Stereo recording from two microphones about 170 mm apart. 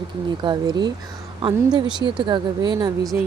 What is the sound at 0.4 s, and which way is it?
Speech, 25° right (ahead or behind).